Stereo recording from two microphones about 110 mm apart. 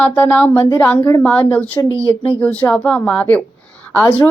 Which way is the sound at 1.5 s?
15° left (ahead or behind).